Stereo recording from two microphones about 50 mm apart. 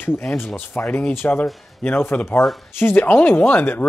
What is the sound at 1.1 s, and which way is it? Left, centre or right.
Speech, left.